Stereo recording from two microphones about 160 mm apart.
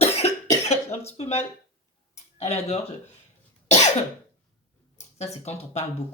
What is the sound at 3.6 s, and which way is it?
Cough, 45° left (ahead or behind).